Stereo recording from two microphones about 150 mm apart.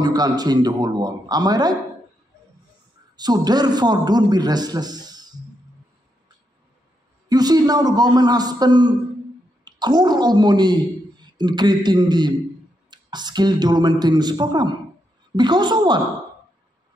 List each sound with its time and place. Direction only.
0.0 s a man's voice: 25° right (ahead or behind)
3.2 s a man's voice: 25° right (ahead or behind)
7.2 s a man's voice: 25° right (ahead or behind)